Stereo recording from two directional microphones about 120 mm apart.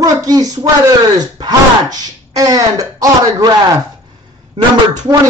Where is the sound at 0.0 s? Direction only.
30° right (ahead or behind).